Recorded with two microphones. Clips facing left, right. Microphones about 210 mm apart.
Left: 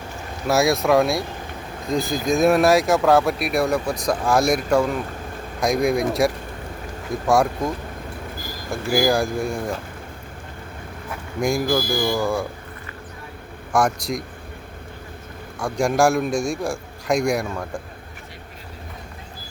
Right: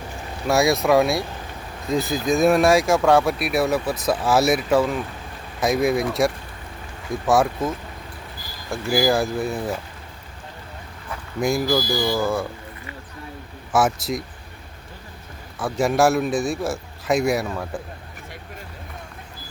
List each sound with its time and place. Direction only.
0.4 s speech: centre (ahead or behind)
7.3 s speech: centre (ahead or behind)
8.7 s speech: centre (ahead or behind)
11.1 s a sound: centre (ahead or behind)
11.6 s speech: 50° left (ahead or behind)
12.1 s speech: centre (ahead or behind)
13.7 s speech: 5° right (ahead or behind)
15.5 s speech: 5° right (ahead or behind)